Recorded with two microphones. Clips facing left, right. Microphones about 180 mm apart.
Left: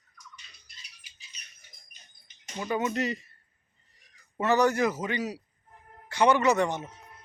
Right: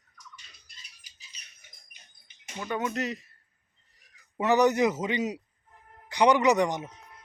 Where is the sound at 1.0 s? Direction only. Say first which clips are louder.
Left 2 dB; 40° right (ahead or behind).